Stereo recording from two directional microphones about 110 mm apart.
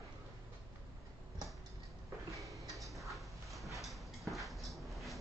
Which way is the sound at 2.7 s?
Centre (ahead or behind).